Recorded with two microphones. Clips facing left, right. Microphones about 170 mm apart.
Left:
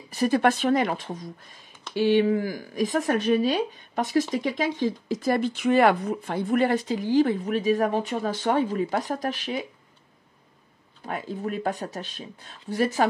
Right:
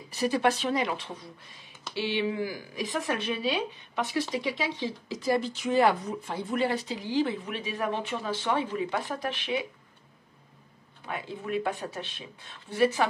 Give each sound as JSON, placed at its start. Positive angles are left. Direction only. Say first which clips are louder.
{"t": 0.1, "sound": "speech", "louder": "left 4 dB", "side_deg": 50}
{"t": 11.1, "sound": "speech", "louder": "left 4 dB", "side_deg": 40}